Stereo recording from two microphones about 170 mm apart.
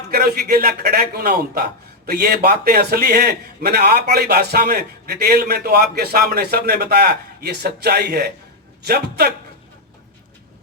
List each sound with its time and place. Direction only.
0.1 s a man's voice: 60° right (ahead or behind)